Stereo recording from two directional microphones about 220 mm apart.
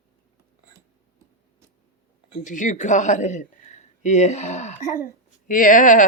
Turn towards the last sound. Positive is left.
turn(degrees=35)  # may be behind; listen again after turning